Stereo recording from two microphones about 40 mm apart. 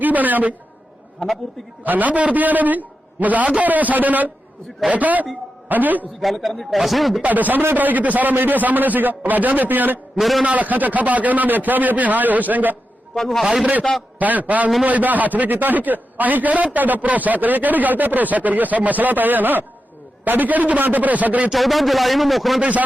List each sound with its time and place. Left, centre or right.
0.0 s a man's voice: right
1.8 s a man's voice: right
6.1 s speech: centre
7.2 s a man's voice: right
10.2 s speech: centre
10.4 s a man's voice: right
13.1 s a man's voice: centre
14.2 s a man's voice: right
21.5 s speech: centre